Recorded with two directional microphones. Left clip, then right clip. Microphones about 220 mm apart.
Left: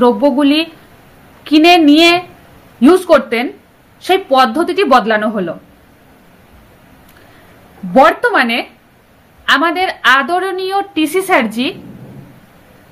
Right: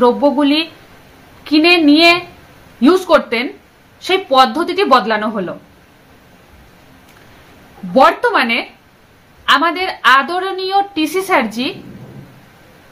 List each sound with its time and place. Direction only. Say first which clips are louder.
0.0 s a woman's voice: left 1 dB; 15° right (ahead or behind)
7.9 s a woman's voice: left 2 dB; 15° right (ahead or behind)